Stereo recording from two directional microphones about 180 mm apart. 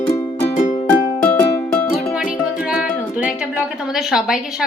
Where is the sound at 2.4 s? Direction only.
5° right (ahead or behind).